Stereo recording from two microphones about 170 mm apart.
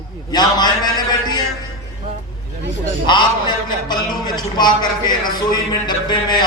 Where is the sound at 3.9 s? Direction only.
25° left (ahead or behind).